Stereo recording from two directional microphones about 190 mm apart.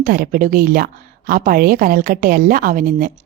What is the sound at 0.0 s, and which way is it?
A woman's voice, 50° right (ahead or behind).